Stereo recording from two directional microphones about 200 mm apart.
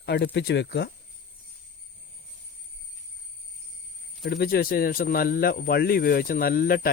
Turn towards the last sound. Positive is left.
turn(degrees=45)  # may be behind; listen again after turning